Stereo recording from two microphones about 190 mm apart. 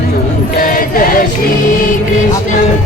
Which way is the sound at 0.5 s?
45° left (ahead or behind).